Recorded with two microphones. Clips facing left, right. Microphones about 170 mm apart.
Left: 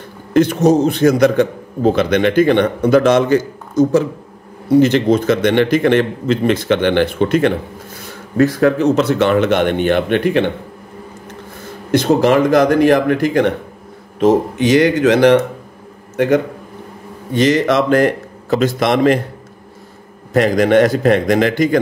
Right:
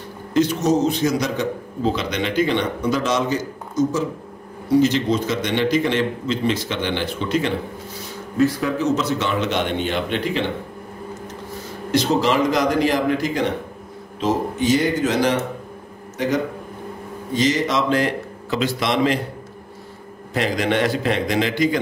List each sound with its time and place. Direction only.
0.3 s a man's voice: 55° left (ahead or behind)
11.9 s a man's voice: 55° left (ahead or behind)
14.2 s a man's voice: 70° left (ahead or behind); by 19.1 s 50° left (ahead or behind)
20.3 s a man's voice: 45° left (ahead or behind)